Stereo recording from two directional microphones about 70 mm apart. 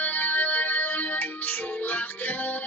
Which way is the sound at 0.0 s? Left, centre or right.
Left.